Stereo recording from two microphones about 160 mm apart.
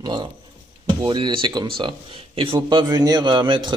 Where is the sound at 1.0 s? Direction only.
30° right (ahead or behind).